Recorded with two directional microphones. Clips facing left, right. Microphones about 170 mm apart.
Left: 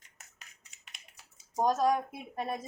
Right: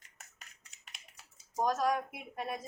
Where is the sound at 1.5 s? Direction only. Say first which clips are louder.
Left 4 dB; 25° left (ahead or behind).